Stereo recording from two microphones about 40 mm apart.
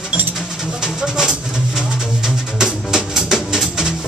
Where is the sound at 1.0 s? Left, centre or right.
Centre.